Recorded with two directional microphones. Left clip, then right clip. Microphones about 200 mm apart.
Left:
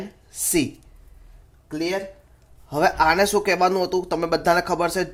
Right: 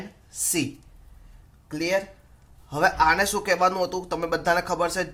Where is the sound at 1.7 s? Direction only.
15° left (ahead or behind).